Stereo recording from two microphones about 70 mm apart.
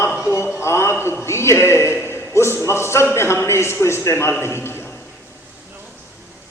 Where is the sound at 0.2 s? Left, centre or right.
Left.